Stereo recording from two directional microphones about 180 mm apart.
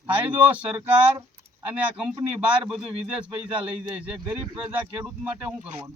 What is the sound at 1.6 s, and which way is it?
A man's voice, 5° right (ahead or behind).